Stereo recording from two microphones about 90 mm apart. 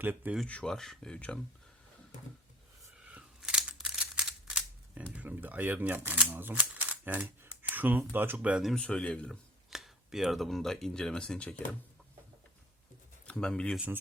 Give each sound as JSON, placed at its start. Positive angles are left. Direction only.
{"t": 0.0, "sound": "speech", "side_deg": -20}
{"t": 0.4, "sound": "speech", "side_deg": 10}
{"t": 3.1, "sound": "camera", "side_deg": -10}
{"t": 5.1, "sound": "speech", "side_deg": -20}
{"t": 8.6, "sound": "speech", "side_deg": 10}
{"t": 9.6, "sound": "speech", "side_deg": -5}
{"t": 13.2, "sound": "speech", "side_deg": 10}
{"t": 13.7, "sound": "speech", "side_deg": -20}